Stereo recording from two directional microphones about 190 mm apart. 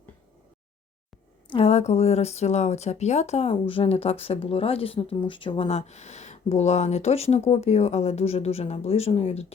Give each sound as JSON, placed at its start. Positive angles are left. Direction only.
{"t": 1.5, "sound": "speech", "side_deg": 30}